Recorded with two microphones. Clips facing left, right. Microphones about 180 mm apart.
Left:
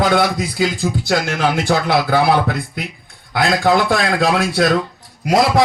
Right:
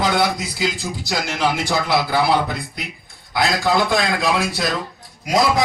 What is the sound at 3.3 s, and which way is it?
A man's voice, 60° left (ahead or behind).